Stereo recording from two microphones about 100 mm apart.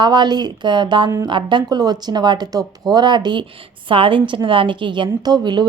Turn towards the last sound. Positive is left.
turn(degrees=-50)  # may be behind; listen again after turning